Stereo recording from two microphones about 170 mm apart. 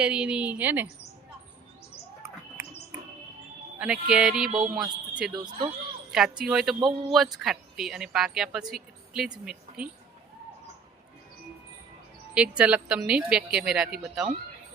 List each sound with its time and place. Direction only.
0.0 s a woman's voice: 5° right (ahead or behind)
4.1 s a woman's voice: 5° right (ahead or behind)
5.3 s speech: 25° right (ahead or behind)
6.1 s a woman's voice: 5° right (ahead or behind)
12.3 s a woman's voice: 5° right (ahead or behind)